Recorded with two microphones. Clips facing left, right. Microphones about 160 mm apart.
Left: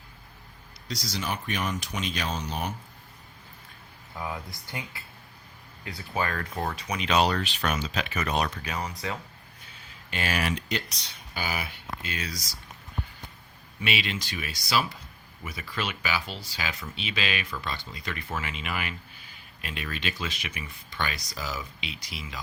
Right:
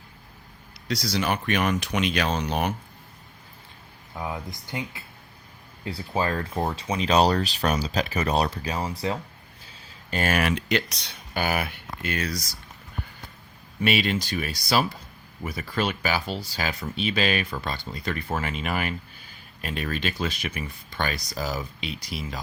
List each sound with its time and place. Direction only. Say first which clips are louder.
0.9 s speech: right 7 dB; 65° right (ahead or behind)
4.1 s speech: right 3 dB; 20° right (ahead or behind)
5.8 s speech: right 4 dB; 30° right (ahead or behind)
10.1 s speech: right 5 dB; 45° right (ahead or behind)
13.8 s speech: right 7 dB; 45° right (ahead or behind)